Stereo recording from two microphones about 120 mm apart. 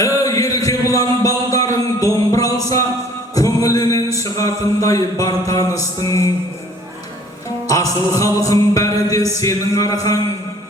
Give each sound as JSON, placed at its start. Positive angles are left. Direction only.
{"t": 0.0, "sound": "music", "side_deg": 30}
{"t": 3.3, "sound": "speech", "side_deg": 30}
{"t": 7.7, "sound": "speech", "side_deg": 30}